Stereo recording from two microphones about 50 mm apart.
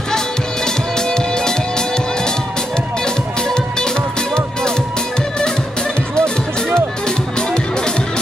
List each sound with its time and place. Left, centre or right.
0.7 s music: centre
3.4 s music: centre
6.1 s music: centre